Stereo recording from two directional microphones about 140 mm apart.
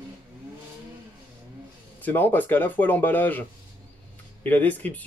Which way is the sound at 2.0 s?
15° left (ahead or behind).